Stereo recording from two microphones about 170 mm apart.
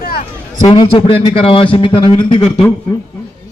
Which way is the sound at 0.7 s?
35° left (ahead or behind).